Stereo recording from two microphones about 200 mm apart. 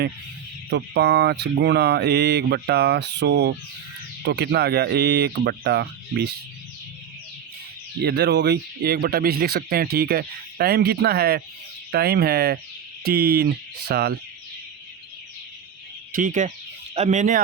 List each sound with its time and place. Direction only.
0.7 s speech: 55° right (ahead or behind)
8.0 s speech: 60° right (ahead or behind)
16.1 s speech: 40° right (ahead or behind)